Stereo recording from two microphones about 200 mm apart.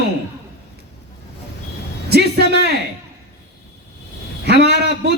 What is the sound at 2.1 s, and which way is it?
Speech, 55° right (ahead or behind).